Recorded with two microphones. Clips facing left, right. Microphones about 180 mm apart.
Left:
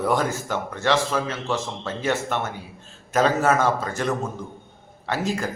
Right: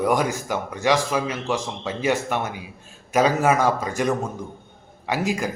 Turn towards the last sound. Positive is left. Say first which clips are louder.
# right 1 dB
turn(degrees=-15)  # may be behind; listen again after turning